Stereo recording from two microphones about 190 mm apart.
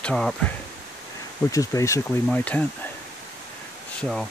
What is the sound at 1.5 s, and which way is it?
Speech, 15° left (ahead or behind).